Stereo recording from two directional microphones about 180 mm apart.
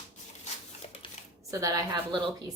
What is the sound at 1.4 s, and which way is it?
A woman's voice, 20° right (ahead or behind).